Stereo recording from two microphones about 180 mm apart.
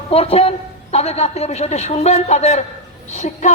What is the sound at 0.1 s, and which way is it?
A man's voice, 30° left (ahead or behind).